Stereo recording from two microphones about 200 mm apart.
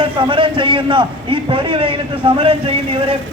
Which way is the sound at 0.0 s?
25° right (ahead or behind).